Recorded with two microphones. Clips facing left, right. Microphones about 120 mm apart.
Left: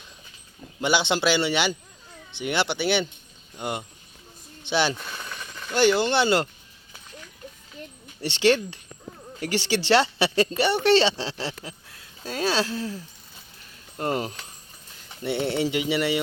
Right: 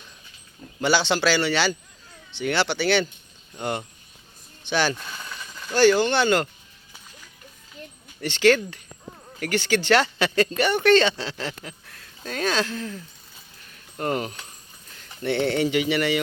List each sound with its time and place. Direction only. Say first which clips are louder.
0.8 s a man's voice: right 1 dB; 15° left (ahead or behind)
8.2 s a man's voice: right 2 dB; 25° left (ahead or behind)
14.0 s speech: even; 20° left (ahead or behind)
15.2 s speech: right 3 dB; 5° left (ahead or behind)
15.7 s speech: right 2 dB; 25° left (ahead or behind)